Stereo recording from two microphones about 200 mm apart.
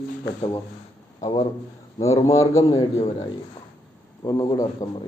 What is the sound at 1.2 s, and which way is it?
A man's voice, 20° left (ahead or behind).